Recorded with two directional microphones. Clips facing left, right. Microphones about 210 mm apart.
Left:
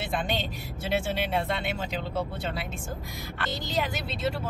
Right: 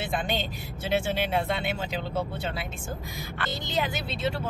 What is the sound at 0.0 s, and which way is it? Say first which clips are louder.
Speech: right 1 dB; centre (ahead or behind).